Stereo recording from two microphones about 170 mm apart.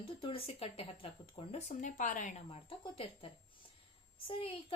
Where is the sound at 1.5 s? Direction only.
45° left (ahead or behind).